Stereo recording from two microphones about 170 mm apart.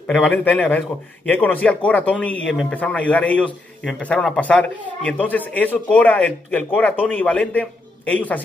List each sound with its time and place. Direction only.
0.1 s a man's voice: 5° left (ahead or behind)